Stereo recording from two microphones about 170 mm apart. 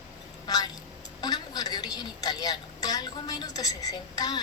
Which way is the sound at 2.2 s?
25° left (ahead or behind).